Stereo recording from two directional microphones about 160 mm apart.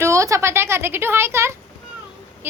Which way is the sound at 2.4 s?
15° right (ahead or behind).